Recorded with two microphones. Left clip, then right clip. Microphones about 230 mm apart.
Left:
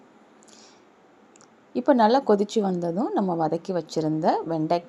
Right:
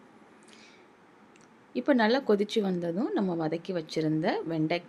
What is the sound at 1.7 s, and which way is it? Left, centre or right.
A woman's voice, centre.